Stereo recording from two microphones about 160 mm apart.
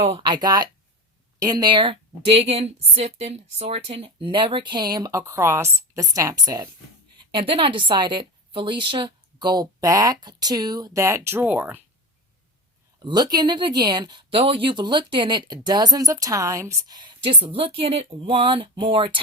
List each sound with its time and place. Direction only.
0.0 s a woman's voice: 35° right (ahead or behind); by 11.8 s 10° right (ahead or behind)
13.0 s a woman's voice: 25° right (ahead or behind)